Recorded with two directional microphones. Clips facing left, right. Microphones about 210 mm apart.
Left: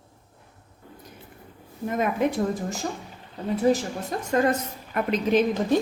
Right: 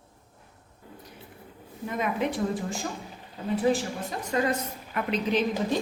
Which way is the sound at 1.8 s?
45° left (ahead or behind).